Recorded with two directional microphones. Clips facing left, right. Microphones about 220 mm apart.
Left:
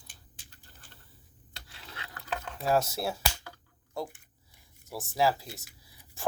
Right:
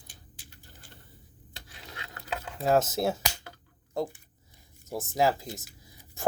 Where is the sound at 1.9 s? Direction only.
25° right (ahead or behind).